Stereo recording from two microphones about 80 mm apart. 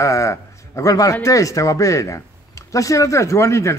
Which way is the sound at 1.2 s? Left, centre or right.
Left.